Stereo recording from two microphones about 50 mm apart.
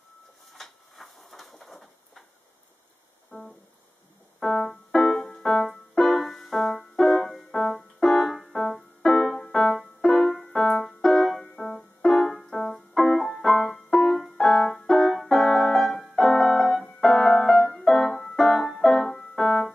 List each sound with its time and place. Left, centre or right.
0.5 s a sound: centre
3.3 s music: left
4.4 s keyboard: centre
5.1 s music: centre
7.7 s keyboard: centre
9.3 s music: centre
11.4 s music: left
11.7 s music: centre
17.0 s keyboard: centre
18.8 s music: centre